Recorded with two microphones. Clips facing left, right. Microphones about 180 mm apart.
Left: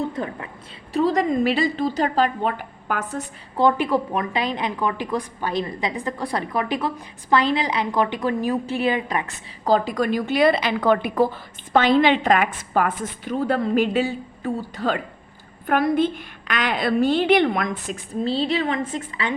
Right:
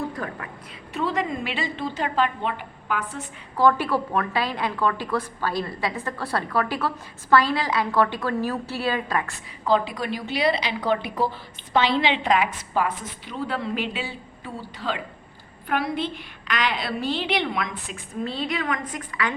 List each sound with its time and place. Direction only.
0.2 s a woman's voice: 25° left (ahead or behind)
0.9 s a woman's voice: 40° left (ahead or behind)
3.6 s a woman's voice: 20° left (ahead or behind)
9.6 s a woman's voice: 40° left (ahead or behind); by 19.3 s 25° left (ahead or behind)